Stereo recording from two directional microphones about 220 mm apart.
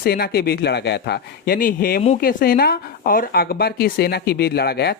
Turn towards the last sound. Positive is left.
turn(degrees=50)  # may be behind; listen again after turning